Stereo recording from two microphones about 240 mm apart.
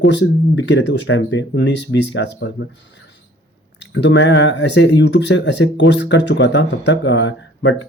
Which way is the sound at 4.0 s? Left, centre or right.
Left.